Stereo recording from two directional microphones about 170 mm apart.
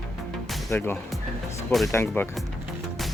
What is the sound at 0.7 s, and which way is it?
Speech, 15° left (ahead or behind).